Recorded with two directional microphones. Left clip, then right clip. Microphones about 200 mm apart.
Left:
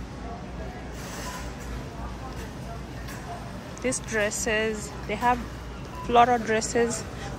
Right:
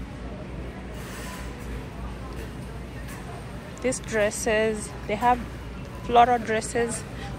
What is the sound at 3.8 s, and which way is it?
A woman's voice, 15° left (ahead or behind).